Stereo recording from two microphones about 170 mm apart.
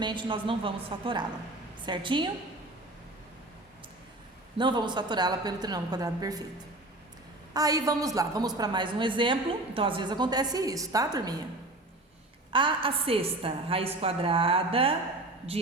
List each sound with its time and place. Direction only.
0.0 s a woman's voice: 30° right (ahead or behind)
4.5 s a woman's voice: 25° right (ahead or behind)
7.5 s a woman's voice: 20° right (ahead or behind)
12.5 s a woman's voice: 30° right (ahead or behind)